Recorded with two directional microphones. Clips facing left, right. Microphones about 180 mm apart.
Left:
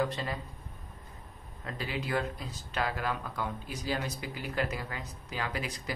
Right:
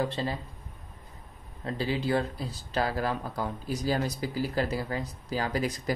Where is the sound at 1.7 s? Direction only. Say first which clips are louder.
Right 6 dB; 30° right (ahead or behind).